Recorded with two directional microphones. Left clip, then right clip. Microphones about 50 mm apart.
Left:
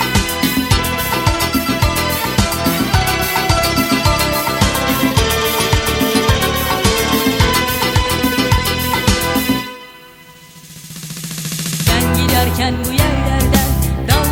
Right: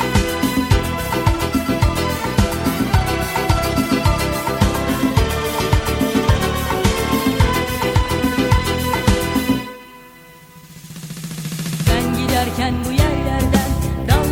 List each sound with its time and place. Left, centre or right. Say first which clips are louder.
0.0 s music: left 2 dB; left
11.6 s music: left 3 dB; left